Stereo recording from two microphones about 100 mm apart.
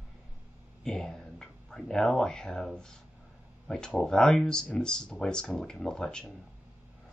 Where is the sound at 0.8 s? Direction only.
5° left (ahead or behind).